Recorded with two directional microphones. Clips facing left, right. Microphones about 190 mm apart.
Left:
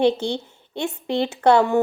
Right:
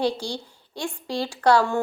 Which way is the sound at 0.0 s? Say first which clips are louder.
Left 6 dB; 25° left (ahead or behind).